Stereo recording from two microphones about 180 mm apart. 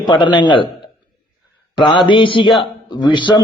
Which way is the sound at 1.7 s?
25° left (ahead or behind).